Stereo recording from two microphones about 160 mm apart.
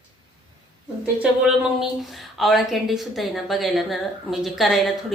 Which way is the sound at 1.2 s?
5° right (ahead or behind).